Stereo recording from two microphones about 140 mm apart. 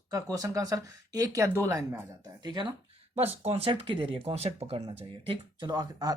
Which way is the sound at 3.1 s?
45° right (ahead or behind).